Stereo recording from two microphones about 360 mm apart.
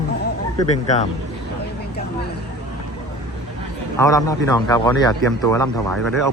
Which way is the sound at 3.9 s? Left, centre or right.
Centre.